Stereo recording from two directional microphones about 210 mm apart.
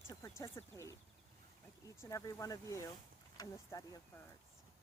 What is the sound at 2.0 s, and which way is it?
Speech, 15° left (ahead or behind).